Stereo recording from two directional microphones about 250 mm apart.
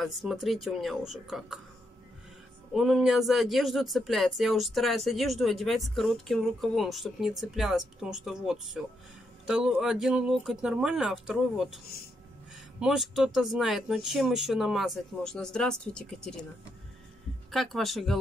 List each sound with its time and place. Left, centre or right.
0.0 s speech: centre
2.7 s speech: centre
12.8 s speech: centre
17.5 s speech: centre